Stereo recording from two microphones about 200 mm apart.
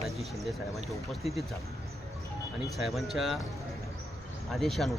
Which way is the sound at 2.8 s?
Centre (ahead or behind).